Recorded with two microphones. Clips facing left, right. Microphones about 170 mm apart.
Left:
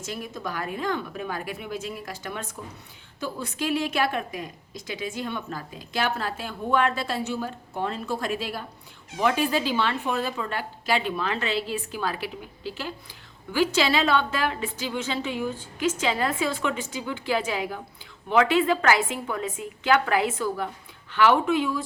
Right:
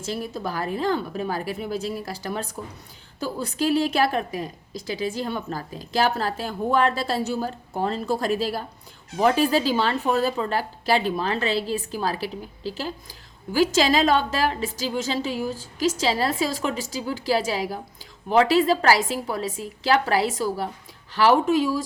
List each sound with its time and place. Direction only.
0.0 s speech: 30° right (ahead or behind)